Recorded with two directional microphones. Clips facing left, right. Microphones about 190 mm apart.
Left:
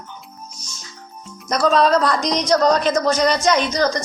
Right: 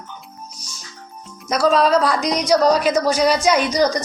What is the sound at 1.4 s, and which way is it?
A man's voice, 5° right (ahead or behind).